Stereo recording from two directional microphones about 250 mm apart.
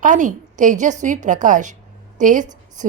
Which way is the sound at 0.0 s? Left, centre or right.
Right.